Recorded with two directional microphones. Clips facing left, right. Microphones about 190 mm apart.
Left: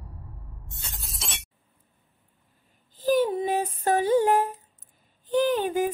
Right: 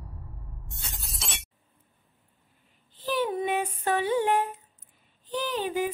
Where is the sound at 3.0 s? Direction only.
45° left (ahead or behind).